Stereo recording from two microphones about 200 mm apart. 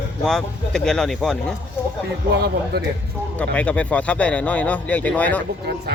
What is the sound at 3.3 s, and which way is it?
Speech, 5° left (ahead or behind).